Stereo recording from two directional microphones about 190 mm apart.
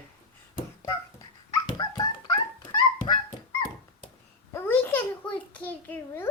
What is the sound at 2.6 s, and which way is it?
Dog, 20° left (ahead or behind).